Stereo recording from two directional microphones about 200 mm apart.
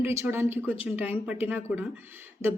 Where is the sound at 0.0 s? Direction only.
10° right (ahead or behind).